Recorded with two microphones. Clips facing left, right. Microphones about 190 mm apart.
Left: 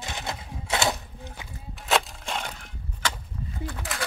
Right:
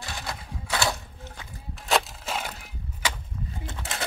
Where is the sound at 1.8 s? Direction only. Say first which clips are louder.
Even; centre (ahead or behind).